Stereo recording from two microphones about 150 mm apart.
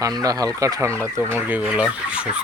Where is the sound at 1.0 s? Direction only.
15° right (ahead or behind).